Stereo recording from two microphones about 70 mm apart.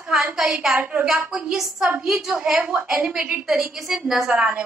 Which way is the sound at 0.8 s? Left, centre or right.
Right.